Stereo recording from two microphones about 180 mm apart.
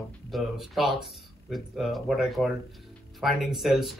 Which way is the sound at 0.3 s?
Centre (ahead or behind).